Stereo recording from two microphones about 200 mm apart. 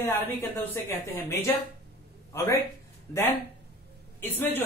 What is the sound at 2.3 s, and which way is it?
Speech, 15° left (ahead or behind).